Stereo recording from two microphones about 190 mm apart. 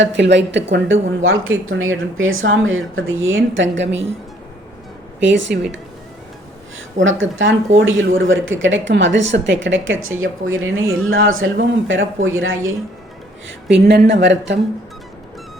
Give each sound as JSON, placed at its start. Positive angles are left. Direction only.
{"t": 0.0, "sound": "a woman's voice", "side_deg": -70}
{"t": 5.2, "sound": "a woman's voice", "side_deg": -75}
{"t": 7.0, "sound": "speech", "side_deg": -90}
{"t": 13.7, "sound": "speech", "side_deg": -65}